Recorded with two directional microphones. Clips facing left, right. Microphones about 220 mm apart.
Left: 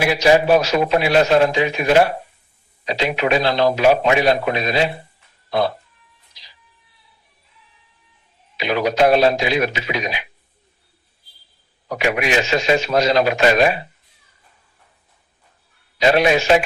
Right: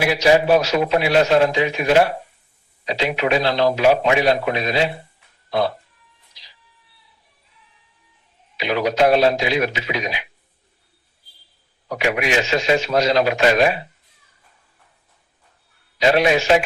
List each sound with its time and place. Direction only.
0.0 s a man's voice: 45° left (ahead or behind)
8.5 s a man's voice: 45° left (ahead or behind)
11.9 s a man's voice: 45° left (ahead or behind)
16.0 s a man's voice: 45° left (ahead or behind)